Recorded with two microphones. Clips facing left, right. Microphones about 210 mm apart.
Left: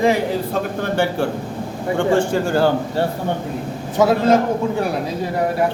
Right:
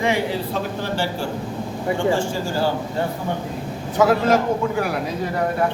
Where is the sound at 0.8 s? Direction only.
55° left (ahead or behind).